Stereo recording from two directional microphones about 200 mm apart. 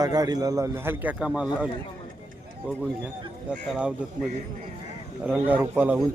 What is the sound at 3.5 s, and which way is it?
Speech, 5° right (ahead or behind).